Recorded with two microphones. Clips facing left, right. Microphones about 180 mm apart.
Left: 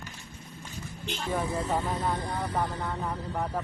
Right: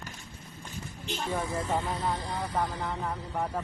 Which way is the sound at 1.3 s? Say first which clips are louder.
Left 2 dB; 30° left (ahead or behind).